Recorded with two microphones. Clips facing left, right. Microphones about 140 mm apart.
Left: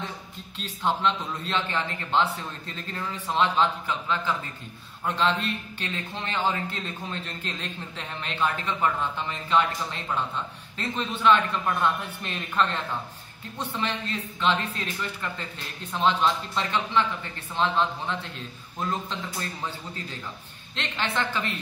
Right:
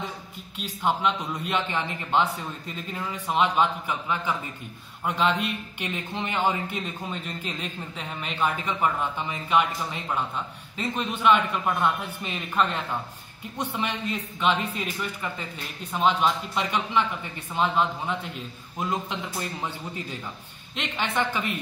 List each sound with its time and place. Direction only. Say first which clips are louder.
0.6 s a man's voice: right 1 dB; 10° right (ahead or behind)